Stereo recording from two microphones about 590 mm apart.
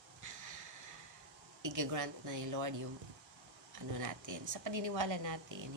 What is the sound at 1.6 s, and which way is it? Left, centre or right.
Speech, right.